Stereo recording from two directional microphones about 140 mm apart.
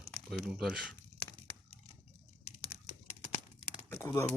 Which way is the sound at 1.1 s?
40° left (ahead or behind).